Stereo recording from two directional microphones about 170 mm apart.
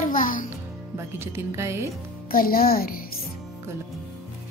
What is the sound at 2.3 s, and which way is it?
Speech, 60° left (ahead or behind).